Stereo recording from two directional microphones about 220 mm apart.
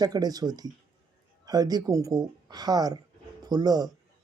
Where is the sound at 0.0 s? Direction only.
15° right (ahead or behind).